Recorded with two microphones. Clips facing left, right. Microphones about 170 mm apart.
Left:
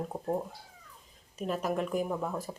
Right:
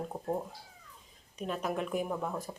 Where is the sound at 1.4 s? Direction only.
Centre (ahead or behind).